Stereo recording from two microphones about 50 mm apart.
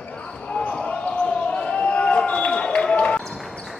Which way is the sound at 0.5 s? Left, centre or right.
Left.